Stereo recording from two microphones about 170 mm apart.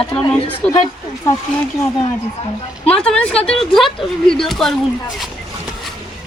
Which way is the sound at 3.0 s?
5° left (ahead or behind).